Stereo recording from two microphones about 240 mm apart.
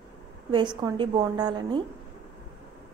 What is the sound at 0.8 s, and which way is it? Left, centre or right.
A woman's voice, centre.